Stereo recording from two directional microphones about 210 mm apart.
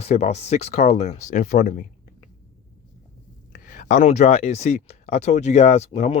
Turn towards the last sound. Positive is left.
turn(degrees=30)  # may be behind; listen again after turning